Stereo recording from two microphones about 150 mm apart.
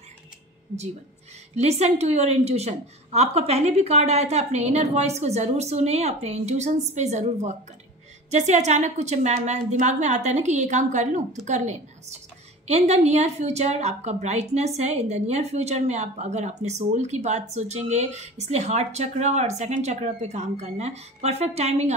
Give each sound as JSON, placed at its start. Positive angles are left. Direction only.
{"t": 1.5, "sound": "a woman's voice", "side_deg": -45}